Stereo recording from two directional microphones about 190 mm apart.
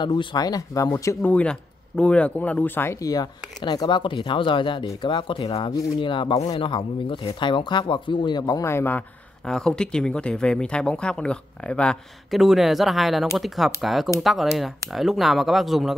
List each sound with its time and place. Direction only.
0.0 s speech: 25° left (ahead or behind); by 15.9 s centre (ahead or behind)